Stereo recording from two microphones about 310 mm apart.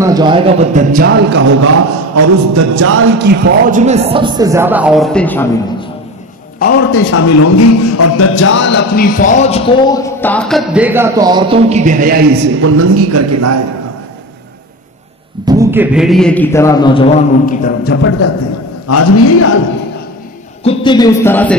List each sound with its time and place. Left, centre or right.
0.0 s a man's voice: centre; by 1.7 s right
2.1 s a man's voice: right; by 5.9 s centre
6.6 s a man's voice: left; by 12.7 s right
12.7 s a man's voice: right
15.4 s a man's voice: centre; by 18.1 s left
18.9 s a man's voice: left
20.6 s a man's voice: centre